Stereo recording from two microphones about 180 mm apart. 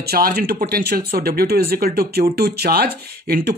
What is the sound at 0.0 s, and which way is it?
Speech, 60° right (ahead or behind).